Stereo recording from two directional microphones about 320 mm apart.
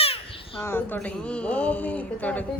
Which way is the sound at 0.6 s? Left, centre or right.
Centre.